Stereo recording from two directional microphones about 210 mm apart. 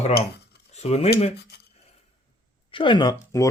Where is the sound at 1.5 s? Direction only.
50° left (ahead or behind).